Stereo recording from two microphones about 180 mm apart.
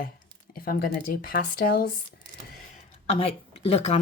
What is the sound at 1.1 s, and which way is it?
Speech, 50° left (ahead or behind).